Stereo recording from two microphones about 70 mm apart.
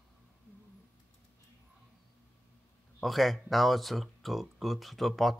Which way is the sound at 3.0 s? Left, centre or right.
Centre.